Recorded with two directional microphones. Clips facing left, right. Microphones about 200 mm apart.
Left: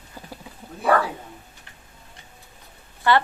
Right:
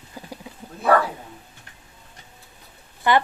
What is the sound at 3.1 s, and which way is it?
Speech, 15° right (ahead or behind).